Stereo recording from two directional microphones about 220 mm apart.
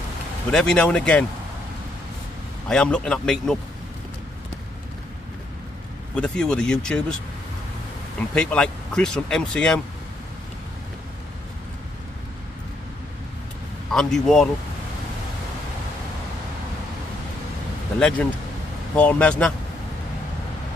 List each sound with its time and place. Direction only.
0.5 s speech: 5° left (ahead or behind)
2.7 s speech: 5° left (ahead or behind)
6.1 s speech: 5° left (ahead or behind)
8.2 s speech: 5° left (ahead or behind)
13.9 s speech: centre (ahead or behind)
17.9 s speech: 5° left (ahead or behind)